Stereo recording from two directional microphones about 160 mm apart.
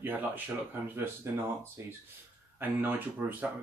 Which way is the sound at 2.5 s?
10° right (ahead or behind).